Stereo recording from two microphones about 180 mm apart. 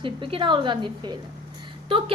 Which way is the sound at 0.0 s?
30° right (ahead or behind).